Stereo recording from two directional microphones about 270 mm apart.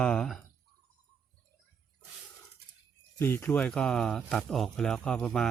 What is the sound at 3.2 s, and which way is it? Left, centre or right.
Speech, centre.